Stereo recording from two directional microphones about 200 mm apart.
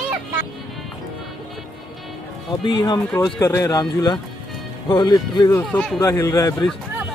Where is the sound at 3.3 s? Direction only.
15° left (ahead or behind).